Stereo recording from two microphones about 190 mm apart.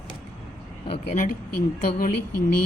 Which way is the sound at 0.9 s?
40° left (ahead or behind).